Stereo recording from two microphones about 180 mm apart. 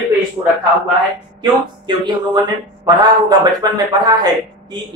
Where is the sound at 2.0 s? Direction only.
25° right (ahead or behind).